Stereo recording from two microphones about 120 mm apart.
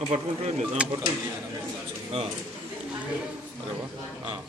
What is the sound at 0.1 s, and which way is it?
Speech, 65° right (ahead or behind).